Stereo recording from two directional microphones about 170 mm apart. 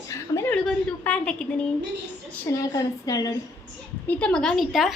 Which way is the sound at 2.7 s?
20° left (ahead or behind).